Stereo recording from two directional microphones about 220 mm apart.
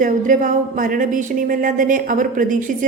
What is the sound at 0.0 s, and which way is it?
A woman's voice, 35° right (ahead or behind).